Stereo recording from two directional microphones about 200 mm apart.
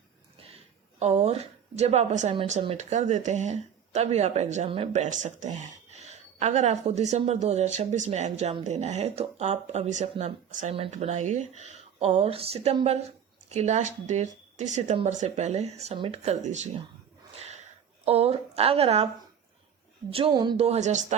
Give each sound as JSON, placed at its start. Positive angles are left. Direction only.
{"t": 0.9, "sound": "a woman's voice", "side_deg": -35}
{"t": 17.3, "sound": "a sound", "side_deg": -35}
{"t": 18.0, "sound": "a woman's voice", "side_deg": -30}
{"t": 20.1, "sound": "speech", "side_deg": -25}